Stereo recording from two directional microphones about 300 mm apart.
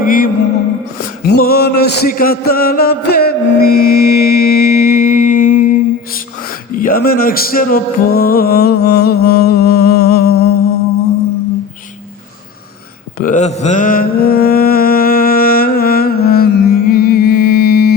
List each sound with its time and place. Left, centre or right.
0.0 s music: left
1.2 s a sound: left
6.7 s music: left
13.1 s mantra: left